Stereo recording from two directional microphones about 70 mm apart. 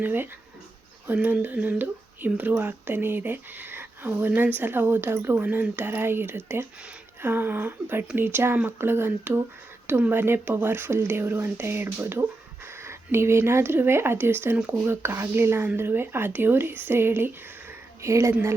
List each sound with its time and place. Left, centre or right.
0.0 s speech: right
9.9 s speech: right
10.2 s speech: right